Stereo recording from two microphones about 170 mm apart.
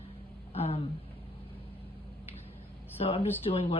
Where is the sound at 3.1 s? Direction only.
35° left (ahead or behind).